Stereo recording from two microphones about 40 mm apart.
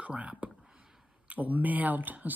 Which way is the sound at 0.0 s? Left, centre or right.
Right.